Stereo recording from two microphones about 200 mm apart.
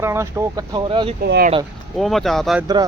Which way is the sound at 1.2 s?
50° right (ahead or behind).